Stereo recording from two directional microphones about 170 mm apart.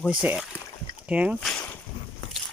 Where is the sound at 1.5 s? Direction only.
5° left (ahead or behind).